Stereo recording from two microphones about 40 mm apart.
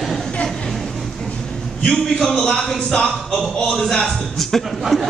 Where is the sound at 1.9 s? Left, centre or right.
Centre.